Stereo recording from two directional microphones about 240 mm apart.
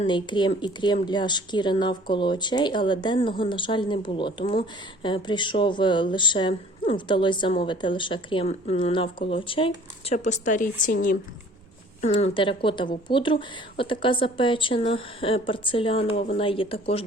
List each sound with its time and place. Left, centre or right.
0.0 s speech: centre
12.0 s speech: left